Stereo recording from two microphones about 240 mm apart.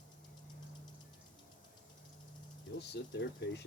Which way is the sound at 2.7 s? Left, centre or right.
Left.